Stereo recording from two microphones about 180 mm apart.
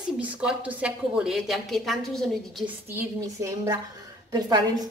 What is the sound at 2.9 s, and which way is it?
A woman's voice, 15° right (ahead or behind).